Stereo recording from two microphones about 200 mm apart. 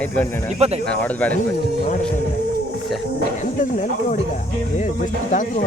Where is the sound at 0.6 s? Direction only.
30° right (ahead or behind).